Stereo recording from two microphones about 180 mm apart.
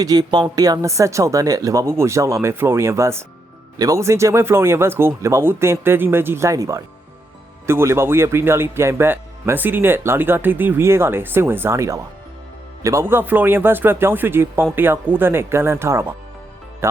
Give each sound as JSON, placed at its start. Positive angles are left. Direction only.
{"t": 0.0, "sound": "speech", "side_deg": -20}